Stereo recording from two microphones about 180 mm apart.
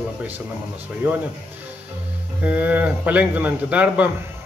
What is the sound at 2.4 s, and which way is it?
A man's voice, 10° right (ahead or behind).